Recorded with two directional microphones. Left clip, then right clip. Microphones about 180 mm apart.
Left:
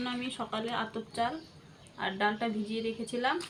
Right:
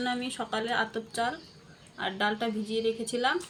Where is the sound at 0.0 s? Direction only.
35° right (ahead or behind).